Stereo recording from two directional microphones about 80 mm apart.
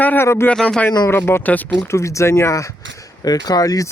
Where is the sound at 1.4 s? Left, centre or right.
Centre.